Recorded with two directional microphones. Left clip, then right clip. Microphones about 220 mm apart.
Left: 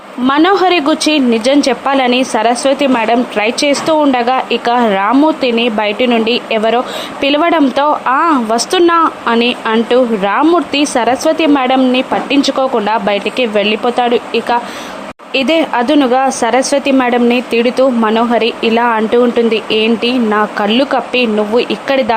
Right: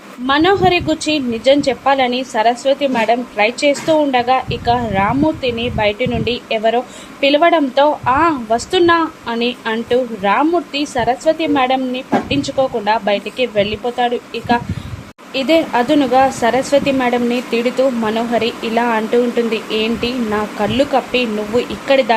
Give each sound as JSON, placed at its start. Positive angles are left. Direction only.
{"t": 0.3, "sound": "a woman's voice", "side_deg": 20}